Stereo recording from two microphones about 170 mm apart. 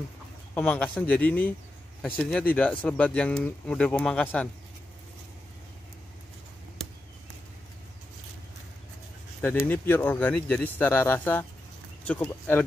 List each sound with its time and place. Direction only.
0.6 s speech: 10° left (ahead or behind)
9.4 s speech: 10° left (ahead or behind)